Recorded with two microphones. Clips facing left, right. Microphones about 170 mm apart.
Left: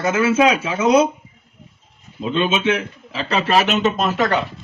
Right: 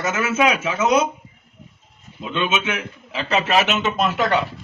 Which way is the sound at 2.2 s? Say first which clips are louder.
Left 4 dB; 30° left (ahead or behind).